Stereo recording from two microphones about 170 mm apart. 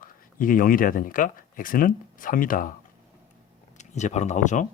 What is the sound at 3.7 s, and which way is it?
Speech, 45° left (ahead or behind).